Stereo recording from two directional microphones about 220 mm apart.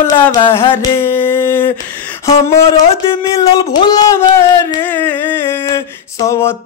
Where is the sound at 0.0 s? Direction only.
10° left (ahead or behind).